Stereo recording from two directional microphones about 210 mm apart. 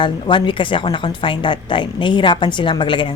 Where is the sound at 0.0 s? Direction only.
20° left (ahead or behind).